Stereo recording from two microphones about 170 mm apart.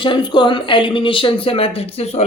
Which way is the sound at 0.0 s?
30° left (ahead or behind).